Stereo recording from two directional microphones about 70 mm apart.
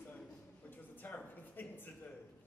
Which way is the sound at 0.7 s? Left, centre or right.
Left.